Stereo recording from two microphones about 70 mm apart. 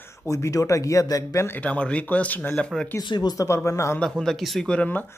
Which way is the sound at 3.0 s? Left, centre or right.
Left.